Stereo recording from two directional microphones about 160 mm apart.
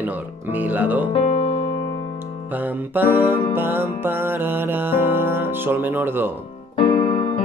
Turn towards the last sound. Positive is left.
turn(degrees=30)  # may be behind; listen again after turning